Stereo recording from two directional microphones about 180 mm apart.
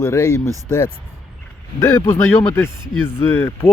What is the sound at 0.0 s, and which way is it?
Speech, 15° left (ahead or behind).